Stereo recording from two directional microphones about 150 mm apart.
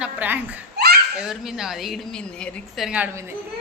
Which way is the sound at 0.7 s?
90° right.